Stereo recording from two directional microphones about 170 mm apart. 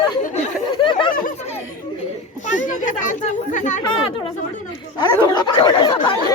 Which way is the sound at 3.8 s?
25° left (ahead or behind).